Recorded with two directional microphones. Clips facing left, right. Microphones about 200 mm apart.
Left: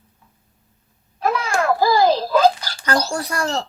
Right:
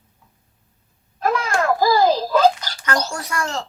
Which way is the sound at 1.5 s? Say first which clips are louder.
Even; 10° left (ahead or behind).